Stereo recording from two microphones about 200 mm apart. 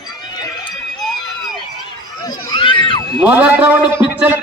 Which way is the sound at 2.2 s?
20° left (ahead or behind).